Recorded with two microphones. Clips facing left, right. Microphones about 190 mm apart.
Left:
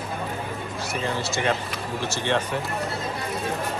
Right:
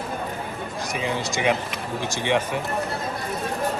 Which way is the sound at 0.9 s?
15° right (ahead or behind).